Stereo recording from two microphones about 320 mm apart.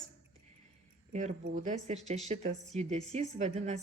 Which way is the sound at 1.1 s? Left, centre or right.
Right.